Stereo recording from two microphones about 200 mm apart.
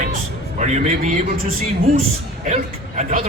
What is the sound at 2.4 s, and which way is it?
Speech, 35° right (ahead or behind).